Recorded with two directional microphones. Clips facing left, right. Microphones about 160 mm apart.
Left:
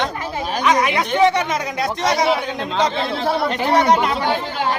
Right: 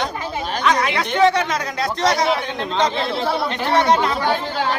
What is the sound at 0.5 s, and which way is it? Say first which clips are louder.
Speech: left 2 dB; 15° left (ahead or behind).